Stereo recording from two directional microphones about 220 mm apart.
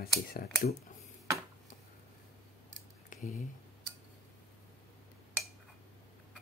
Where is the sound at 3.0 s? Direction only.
35° left (ahead or behind).